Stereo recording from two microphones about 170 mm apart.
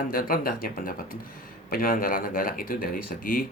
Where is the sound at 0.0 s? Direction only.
55° left (ahead or behind).